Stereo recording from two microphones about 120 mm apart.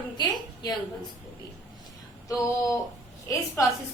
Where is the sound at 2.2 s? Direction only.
25° left (ahead or behind).